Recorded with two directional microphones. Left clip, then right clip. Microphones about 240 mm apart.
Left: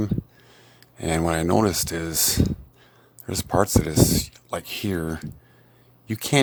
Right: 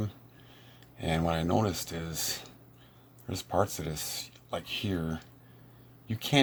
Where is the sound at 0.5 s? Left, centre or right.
Left.